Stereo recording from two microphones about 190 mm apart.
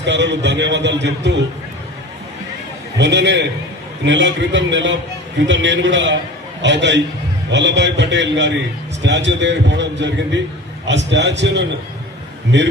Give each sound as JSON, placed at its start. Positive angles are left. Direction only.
{"t": 0.0, "sound": "a man's voice", "side_deg": -70}
{"t": 3.0, "sound": "a man's voice", "side_deg": -65}